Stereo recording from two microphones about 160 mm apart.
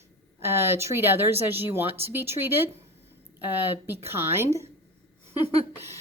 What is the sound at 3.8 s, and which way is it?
Speech, 15° right (ahead or behind).